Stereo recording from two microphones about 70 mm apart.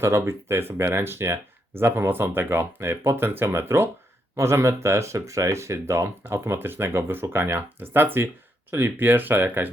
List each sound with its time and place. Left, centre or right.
0.0 s speech: right